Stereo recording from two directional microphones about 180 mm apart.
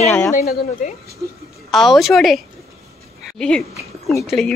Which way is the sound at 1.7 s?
Centre (ahead or behind).